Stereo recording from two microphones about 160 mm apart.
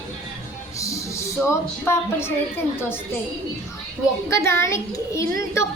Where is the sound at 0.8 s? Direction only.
20° left (ahead or behind).